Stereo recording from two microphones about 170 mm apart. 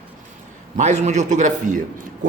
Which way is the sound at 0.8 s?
40° right (ahead or behind).